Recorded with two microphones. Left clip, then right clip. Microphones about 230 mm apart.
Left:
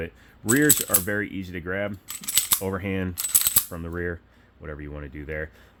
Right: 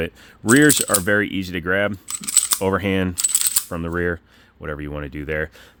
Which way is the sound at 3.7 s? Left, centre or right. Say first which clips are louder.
Right 8 dB; right.